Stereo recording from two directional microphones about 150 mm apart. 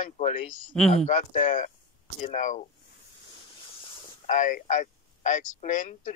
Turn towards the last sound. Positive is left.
turn(degrees=55)  # may be behind; listen again after turning